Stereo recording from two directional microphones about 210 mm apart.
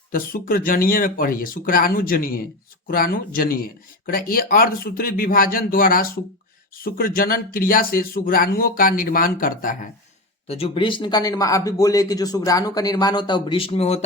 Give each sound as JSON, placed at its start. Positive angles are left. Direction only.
{"t": 0.1, "sound": "speech", "side_deg": 45}
{"t": 10.4, "sound": "speech", "side_deg": 30}